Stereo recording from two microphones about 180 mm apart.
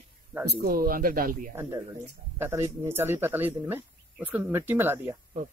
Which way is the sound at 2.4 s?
15° right (ahead or behind).